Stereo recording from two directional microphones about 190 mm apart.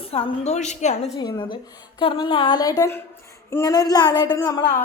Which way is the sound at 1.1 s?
25° left (ahead or behind).